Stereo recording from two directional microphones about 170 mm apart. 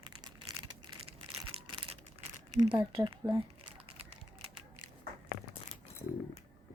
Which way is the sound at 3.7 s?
35° right (ahead or behind).